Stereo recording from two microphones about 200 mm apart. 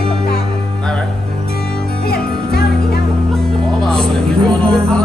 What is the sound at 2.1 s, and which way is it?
Music, 55° left (ahead or behind).